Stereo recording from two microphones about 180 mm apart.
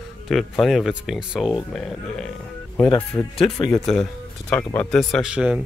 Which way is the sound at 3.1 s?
15° left (ahead or behind).